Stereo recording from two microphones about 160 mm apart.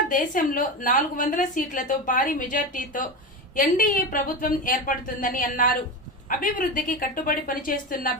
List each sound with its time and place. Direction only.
0.1 s a woman's voice: 55° left (ahead or behind)